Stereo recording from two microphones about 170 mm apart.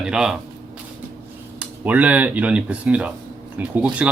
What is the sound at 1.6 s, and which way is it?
Speech, 10° right (ahead or behind).